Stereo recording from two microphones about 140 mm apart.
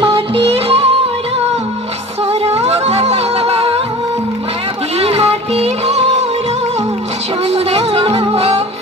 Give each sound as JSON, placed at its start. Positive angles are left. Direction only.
{"t": 0.0, "sound": "music", "side_deg": -40}
{"t": 2.4, "sound": "music", "side_deg": -50}
{"t": 4.9, "sound": "music", "side_deg": -45}
{"t": 7.5, "sound": "music", "side_deg": -45}